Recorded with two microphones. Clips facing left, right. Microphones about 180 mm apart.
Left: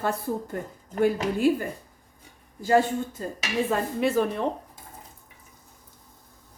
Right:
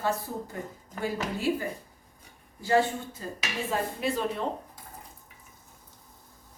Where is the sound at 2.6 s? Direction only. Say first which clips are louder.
Left 3 dB; 50° left (ahead or behind).